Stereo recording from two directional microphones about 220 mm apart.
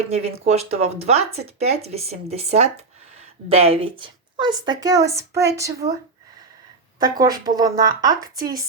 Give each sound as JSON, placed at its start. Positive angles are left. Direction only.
{"t": 0.1, "sound": "a woman's voice", "side_deg": -30}
{"t": 7.0, "sound": "a woman's voice", "side_deg": -15}